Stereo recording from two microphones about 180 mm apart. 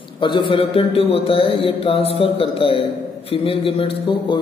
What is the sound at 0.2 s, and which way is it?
A man's voice, 25° left (ahead or behind).